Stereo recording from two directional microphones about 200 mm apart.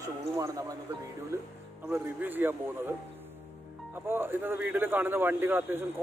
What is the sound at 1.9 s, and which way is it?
Speech, 10° right (ahead or behind).